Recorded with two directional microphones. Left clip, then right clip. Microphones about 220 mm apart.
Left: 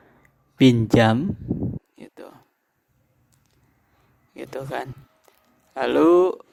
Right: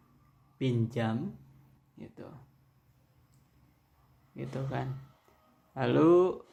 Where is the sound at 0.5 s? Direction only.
45° left (ahead or behind).